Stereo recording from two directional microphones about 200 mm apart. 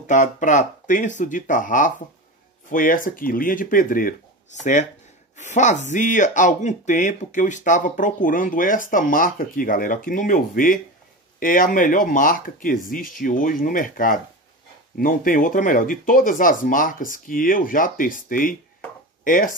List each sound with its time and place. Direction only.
0.0 s speech: 40° left (ahead or behind)